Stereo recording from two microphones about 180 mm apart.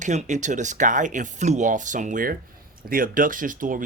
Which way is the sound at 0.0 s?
40° right (ahead or behind).